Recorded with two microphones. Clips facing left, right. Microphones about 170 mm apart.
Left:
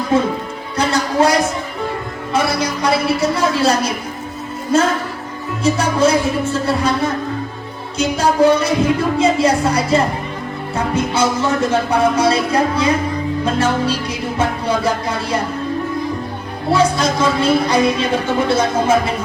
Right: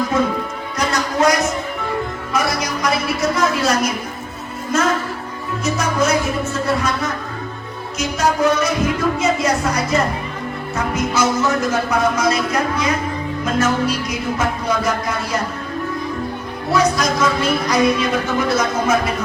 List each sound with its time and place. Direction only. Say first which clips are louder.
0.1 s music: left 2 dB; 30° left (ahead or behind)
2.3 s a woman's voice: left 3 dB; 30° left (ahead or behind)
5.6 s speech: left 4 dB; 30° left (ahead or behind)
7.9 s music: left 4 dB; 30° left (ahead or behind)
9.1 s speech: left 4 dB; 30° left (ahead or behind)
13.4 s music: even; 30° left (ahead or behind)
16.7 s speech: left 1 dB; 30° left (ahead or behind)